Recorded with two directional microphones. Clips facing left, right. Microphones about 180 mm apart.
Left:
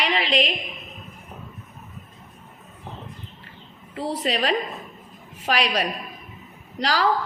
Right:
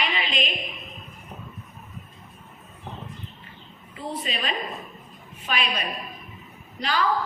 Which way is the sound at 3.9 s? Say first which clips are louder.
Left 6 dB; 85° left.